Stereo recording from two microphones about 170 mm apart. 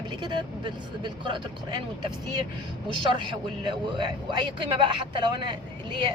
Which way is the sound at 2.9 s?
25° right (ahead or behind).